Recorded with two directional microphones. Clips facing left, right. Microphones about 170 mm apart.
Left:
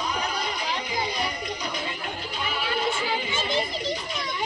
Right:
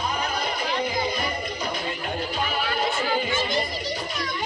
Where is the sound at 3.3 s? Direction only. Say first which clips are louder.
Right 1 dB; 20° left (ahead or behind).